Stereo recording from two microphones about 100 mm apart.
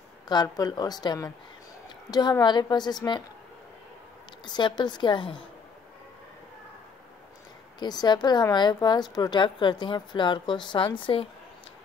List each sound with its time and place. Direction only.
0.3 s a woman's voice: 45° left (ahead or behind)
4.5 s a woman's voice: 45° left (ahead or behind)
7.8 s a woman's voice: 45° left (ahead or behind)